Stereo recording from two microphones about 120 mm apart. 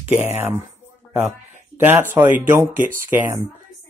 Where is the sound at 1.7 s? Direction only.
20° right (ahead or behind).